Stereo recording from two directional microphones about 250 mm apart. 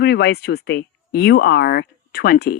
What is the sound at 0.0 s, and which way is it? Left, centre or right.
Speech, left.